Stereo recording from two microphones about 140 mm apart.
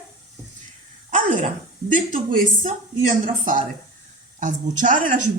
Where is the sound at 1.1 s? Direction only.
65° right (ahead or behind).